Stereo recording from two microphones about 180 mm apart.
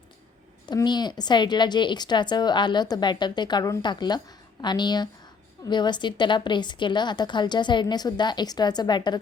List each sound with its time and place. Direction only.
0.7 s a woman's voice: 25° left (ahead or behind)